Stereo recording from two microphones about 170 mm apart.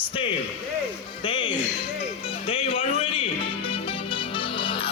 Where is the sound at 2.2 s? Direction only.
35° left (ahead or behind).